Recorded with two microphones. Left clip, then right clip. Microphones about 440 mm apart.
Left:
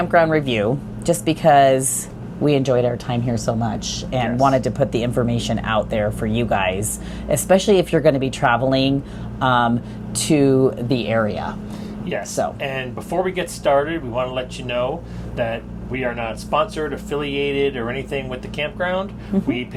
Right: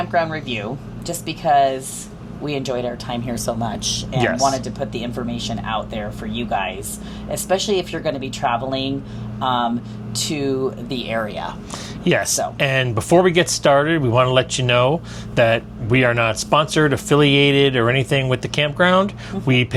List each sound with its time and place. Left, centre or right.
0.1 s speech: left
4.4 s speech: left
12.0 s speech: right